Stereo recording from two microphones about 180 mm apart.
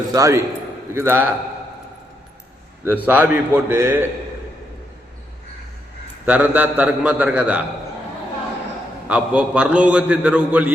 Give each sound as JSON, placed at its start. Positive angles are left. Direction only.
{"t": 0.1, "sound": "a man's voice", "side_deg": -20}
{"t": 2.8, "sound": "a man's voice", "side_deg": -10}
{"t": 6.2, "sound": "a man's voice", "side_deg": -10}
{"t": 9.0, "sound": "a man's voice", "side_deg": -5}